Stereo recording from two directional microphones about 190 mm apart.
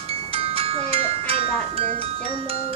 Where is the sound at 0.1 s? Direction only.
30° right (ahead or behind).